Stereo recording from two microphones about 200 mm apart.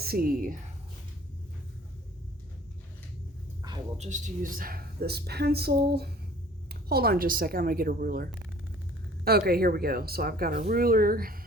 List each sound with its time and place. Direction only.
0.0 s a woman's voice: 50° right (ahead or behind)
3.9 s speech: 35° right (ahead or behind)